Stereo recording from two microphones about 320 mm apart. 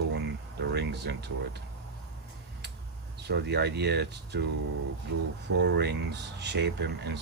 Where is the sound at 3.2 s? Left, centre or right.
Right.